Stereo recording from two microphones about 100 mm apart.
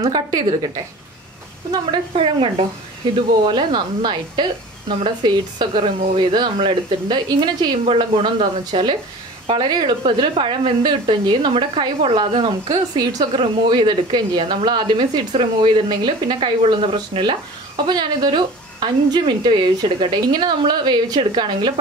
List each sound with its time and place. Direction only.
0.0 s a woman's voice: 40° right (ahead or behind)
2.1 s speech: 60° right (ahead or behind)
3.2 s a woman's voice: 50° right (ahead or behind)
7.8 s a woman's voice: 60° right (ahead or behind)
12.4 s a woman's voice: 45° right (ahead or behind)